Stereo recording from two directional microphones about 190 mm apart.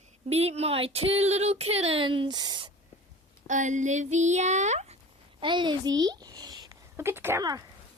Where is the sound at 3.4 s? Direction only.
40° right (ahead or behind).